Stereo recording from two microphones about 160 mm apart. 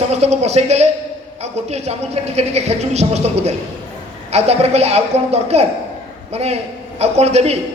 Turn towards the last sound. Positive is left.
turn(degrees=-40)  # may be behind; listen again after turning